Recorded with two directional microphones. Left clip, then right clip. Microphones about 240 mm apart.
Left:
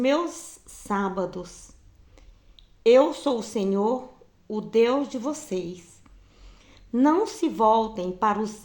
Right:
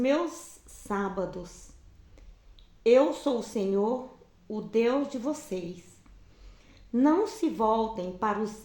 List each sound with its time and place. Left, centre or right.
0.0 s speech: left
2.8 s speech: left